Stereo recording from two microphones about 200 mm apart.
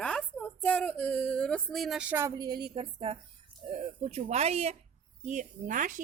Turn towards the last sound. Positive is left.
turn(degrees=-40)  # may be behind; listen again after turning